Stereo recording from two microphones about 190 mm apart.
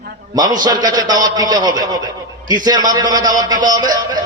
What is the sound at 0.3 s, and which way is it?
A man's voice, 20° right (ahead or behind).